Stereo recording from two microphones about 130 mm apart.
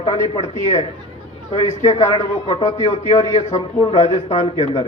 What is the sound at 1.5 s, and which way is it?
A man's voice, 55° left (ahead or behind).